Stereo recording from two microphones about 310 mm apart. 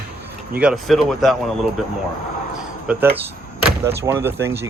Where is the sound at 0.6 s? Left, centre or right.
Centre.